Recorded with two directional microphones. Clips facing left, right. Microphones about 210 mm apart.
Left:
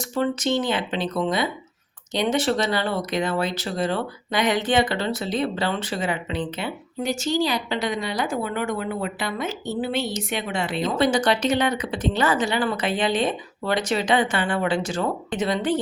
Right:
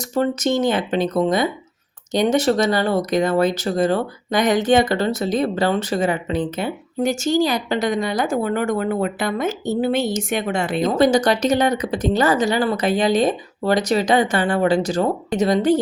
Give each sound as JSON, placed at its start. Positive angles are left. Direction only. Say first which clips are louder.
{"t": 0.2, "sound": "speech", "louder": "right 4 dB", "side_deg": -45}